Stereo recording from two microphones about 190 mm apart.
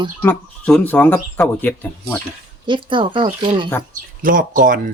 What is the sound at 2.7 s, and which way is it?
Speech, 25° right (ahead or behind).